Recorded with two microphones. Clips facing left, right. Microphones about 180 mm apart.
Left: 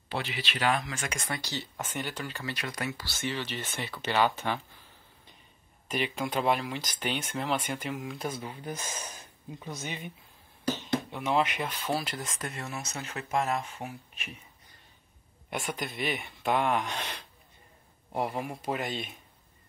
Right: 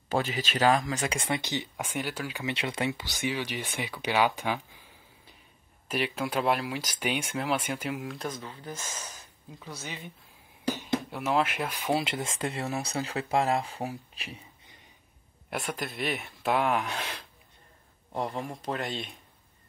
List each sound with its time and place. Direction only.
0.1 s speech: 45° right (ahead or behind)
0.8 s speech: 30° right (ahead or behind); by 2.4 s 10° right (ahead or behind)
2.4 s speech: 25° right (ahead or behind); by 10.1 s 15° left (ahead or behind)
10.7 s speech: 10° right (ahead or behind)
11.9 s speech: 25° right (ahead or behind)
15.5 s speech: centre (ahead or behind)
18.1 s speech: 10° left (ahead or behind)